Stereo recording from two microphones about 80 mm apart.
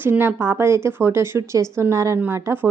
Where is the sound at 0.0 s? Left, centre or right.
Right.